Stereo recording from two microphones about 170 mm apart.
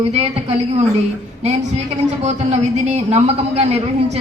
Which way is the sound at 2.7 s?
40° right (ahead or behind).